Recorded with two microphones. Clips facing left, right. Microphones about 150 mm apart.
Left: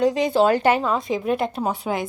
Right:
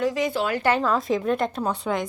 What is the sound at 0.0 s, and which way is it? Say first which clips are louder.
Speech: left 6 dB; 25° left (ahead or behind).